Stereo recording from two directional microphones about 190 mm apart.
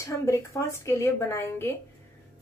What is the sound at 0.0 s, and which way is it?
A woman's voice, 15° left (ahead or behind).